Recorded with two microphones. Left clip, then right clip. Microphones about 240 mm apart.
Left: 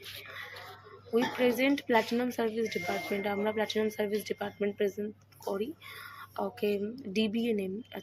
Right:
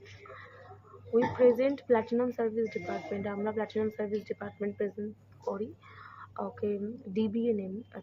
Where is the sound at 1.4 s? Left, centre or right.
Left.